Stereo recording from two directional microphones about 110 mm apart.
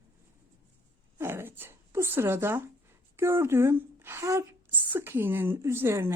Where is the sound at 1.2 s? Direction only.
20° right (ahead or behind).